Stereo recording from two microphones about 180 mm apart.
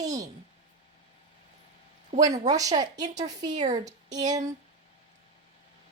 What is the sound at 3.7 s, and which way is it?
Speech, 20° right (ahead or behind).